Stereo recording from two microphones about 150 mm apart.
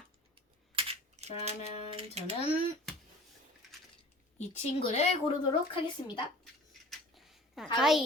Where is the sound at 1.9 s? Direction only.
45° right (ahead or behind).